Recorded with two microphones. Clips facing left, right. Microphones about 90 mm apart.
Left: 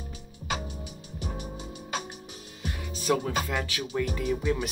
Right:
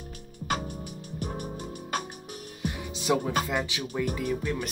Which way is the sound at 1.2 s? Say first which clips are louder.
Right 2 dB; 50° right (ahead or behind).